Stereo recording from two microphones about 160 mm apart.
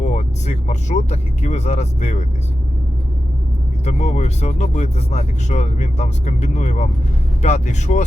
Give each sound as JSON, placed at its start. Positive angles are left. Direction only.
{"t": 0.0, "sound": "speech", "side_deg": 50}
{"t": 3.8, "sound": "speech", "side_deg": 45}